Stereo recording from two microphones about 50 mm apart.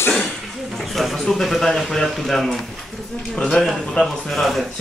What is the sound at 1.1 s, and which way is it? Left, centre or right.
Speech, centre.